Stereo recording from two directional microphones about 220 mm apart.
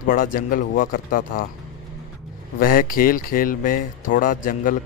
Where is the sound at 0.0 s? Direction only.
40° left (ahead or behind).